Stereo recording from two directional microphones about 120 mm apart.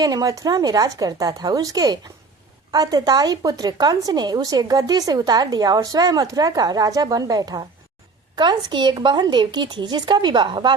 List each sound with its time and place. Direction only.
0.0 s speech: 30° right (ahead or behind)